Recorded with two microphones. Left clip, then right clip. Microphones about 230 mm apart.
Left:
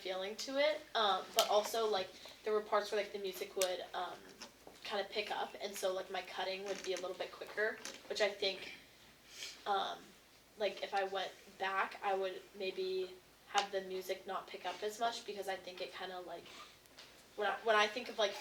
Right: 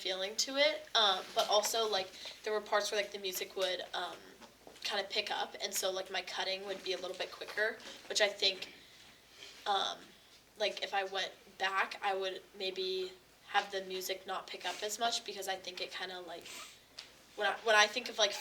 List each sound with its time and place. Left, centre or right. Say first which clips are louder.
0.0 s a woman's voice: right 5 dB; right
9.6 s a woman's voice: right 3 dB; right